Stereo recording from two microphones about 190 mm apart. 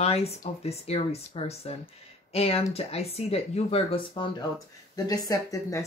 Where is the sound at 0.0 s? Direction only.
30° left (ahead or behind).